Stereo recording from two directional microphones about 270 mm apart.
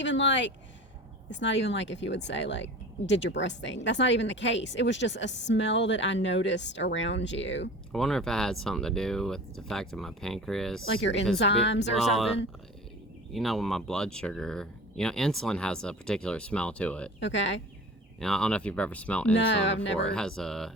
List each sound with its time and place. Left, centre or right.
0.0 s speech: left
7.9 s speech: centre
11.0 s speech: left
11.9 s speech: centre
17.2 s speech: left
18.2 s speech: centre
19.5 s speech: left
20.1 s speech: centre